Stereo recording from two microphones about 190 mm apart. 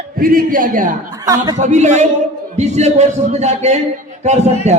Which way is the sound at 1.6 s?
35° right (ahead or behind).